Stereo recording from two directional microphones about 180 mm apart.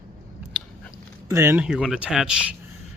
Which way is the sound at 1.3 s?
15° right (ahead or behind).